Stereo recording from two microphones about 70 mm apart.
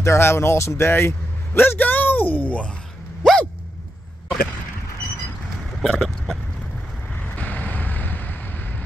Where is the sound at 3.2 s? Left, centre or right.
Centre.